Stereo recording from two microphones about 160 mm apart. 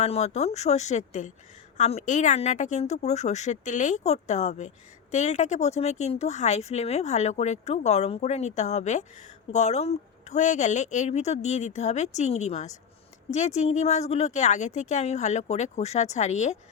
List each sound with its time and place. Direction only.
0.0 s speech: 40° left (ahead or behind)